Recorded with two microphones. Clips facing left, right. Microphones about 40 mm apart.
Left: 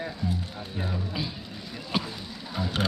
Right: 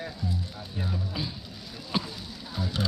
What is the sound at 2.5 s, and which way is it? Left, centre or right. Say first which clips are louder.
Sewing machine: left 3 dB; left.